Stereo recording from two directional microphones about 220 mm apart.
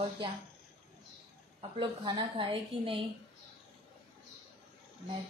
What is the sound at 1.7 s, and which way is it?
A woman's voice, 20° right (ahead or behind).